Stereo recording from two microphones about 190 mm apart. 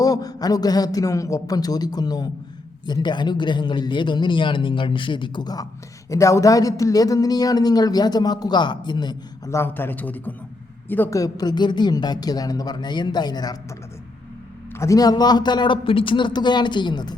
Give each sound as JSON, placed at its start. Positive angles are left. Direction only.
{"t": 0.0, "sound": "speech", "side_deg": 20}
{"t": 14.8, "sound": "speech", "side_deg": 20}